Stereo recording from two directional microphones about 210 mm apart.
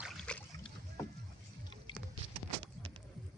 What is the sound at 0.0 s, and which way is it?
Boat, centre (ahead or behind).